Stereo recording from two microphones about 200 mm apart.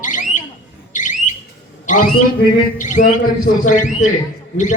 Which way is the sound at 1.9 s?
40° left (ahead or behind).